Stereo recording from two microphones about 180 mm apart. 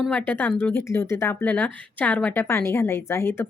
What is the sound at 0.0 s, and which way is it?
A woman's voice, 5° left (ahead or behind).